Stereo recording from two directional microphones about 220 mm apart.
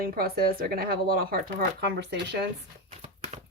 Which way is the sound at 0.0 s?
45° right (ahead or behind).